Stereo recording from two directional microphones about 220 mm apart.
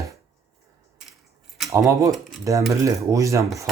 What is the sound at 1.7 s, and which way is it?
Speech, 15° right (ahead or behind).